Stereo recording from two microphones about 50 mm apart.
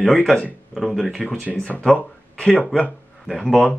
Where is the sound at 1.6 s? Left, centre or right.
Left.